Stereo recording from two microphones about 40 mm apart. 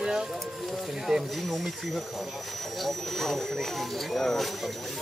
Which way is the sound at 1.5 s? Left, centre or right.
Centre.